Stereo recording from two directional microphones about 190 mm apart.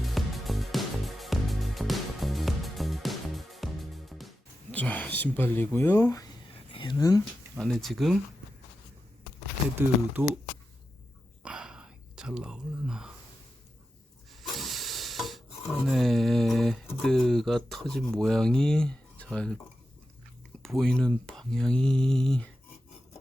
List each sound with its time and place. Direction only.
0.0 s music: centre (ahead or behind)
4.7 s speech: 10° left (ahead or behind)
7.6 s speech: centre (ahead or behind)
10.2 s speech: 15° right (ahead or behind)
11.4 s whispering: 5° right (ahead or behind)
14.4 s stir: centre (ahead or behind)
17.0 s speech: centre (ahead or behind)
20.6 s speech: centre (ahead or behind)